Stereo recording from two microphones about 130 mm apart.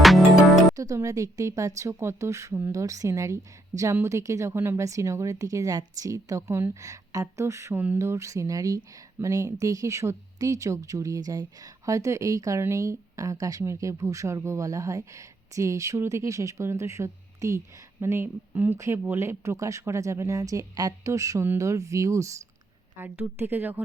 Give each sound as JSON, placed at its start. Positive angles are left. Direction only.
{"t": 0.0, "sound": "music", "side_deg": 0}
{"t": 0.8, "sound": "a woman's voice", "side_deg": -25}